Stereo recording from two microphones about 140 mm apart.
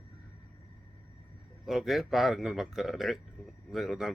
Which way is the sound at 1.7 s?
Centre (ahead or behind).